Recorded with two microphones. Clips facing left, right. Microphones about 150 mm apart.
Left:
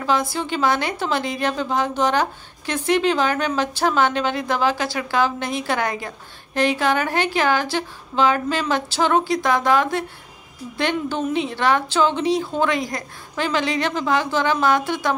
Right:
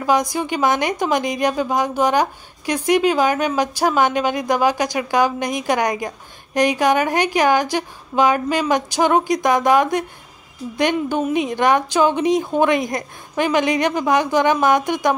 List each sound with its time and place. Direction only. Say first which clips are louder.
0.0 s a woman's voice: right 3 dB; 15° right (ahead or behind)